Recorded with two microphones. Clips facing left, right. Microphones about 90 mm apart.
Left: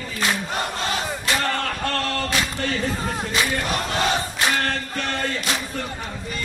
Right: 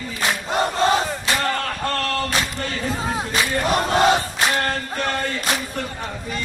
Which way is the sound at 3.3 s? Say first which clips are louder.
Right 4 dB; 35° right (ahead or behind).